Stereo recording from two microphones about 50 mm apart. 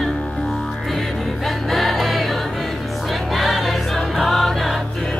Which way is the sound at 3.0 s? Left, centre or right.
Centre.